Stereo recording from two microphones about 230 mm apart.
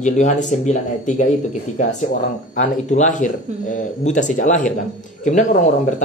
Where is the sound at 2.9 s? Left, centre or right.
Left.